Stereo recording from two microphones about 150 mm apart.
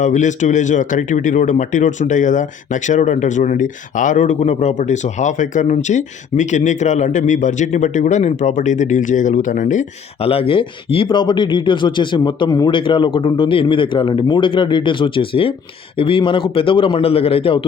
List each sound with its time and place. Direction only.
0.0 s speech: 55° left (ahead or behind)
10.2 s speech: 40° left (ahead or behind)